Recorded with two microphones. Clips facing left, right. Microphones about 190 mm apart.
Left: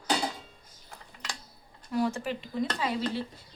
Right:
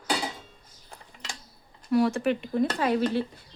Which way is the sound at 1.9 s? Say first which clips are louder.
Right 6 dB; 70° right (ahead or behind).